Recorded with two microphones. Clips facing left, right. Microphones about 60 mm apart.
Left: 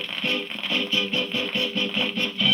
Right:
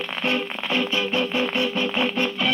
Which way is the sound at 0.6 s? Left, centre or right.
Right.